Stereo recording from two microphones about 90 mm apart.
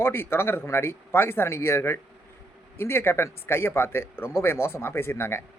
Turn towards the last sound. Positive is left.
turn(degrees=25)  # may be behind; listen again after turning